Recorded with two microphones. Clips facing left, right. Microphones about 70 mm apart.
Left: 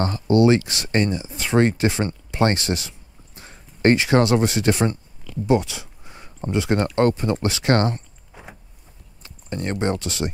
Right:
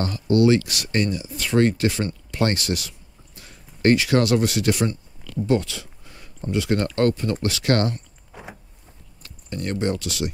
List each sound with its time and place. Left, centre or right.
0.0 s speech: left
5.5 s speech: centre
8.3 s vehicle: centre
9.2 s speech: left